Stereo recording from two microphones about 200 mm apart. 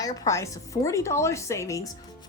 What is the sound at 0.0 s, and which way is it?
A woman's voice, 15° left (ahead or behind).